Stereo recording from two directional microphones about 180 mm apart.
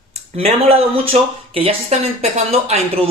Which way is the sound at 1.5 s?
35° right (ahead or behind).